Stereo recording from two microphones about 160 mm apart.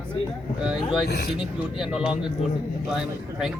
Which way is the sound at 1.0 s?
90° left.